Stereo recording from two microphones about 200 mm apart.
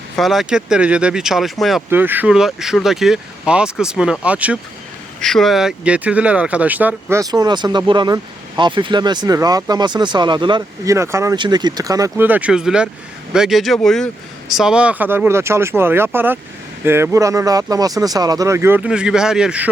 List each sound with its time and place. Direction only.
0.2 s speech: centre (ahead or behind)